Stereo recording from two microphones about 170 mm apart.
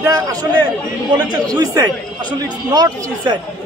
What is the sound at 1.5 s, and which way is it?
A man's voice, 20° right (ahead or behind).